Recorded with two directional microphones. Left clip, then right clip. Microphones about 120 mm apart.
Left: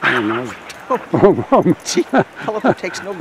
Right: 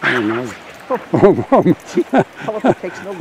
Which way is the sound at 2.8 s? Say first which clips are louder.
Left 2 dB; 50° left (ahead or behind).